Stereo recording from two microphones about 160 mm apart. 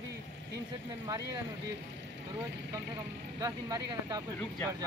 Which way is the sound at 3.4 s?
25° right (ahead or behind).